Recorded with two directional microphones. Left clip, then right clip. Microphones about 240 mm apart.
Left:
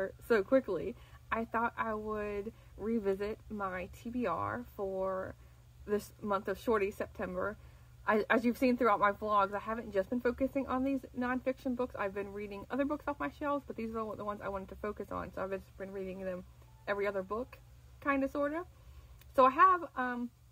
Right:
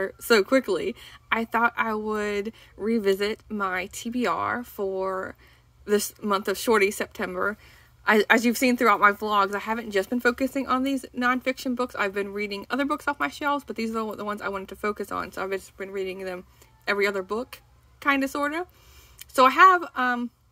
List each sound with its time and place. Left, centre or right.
0.0 s a woman's voice: right